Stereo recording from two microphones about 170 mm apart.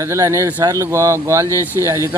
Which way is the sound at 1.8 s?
15° right (ahead or behind).